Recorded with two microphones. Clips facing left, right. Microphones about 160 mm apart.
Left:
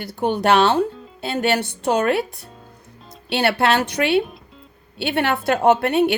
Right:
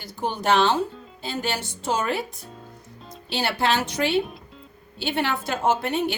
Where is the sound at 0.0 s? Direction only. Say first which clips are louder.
Left 6 dB; 65° left (ahead or behind).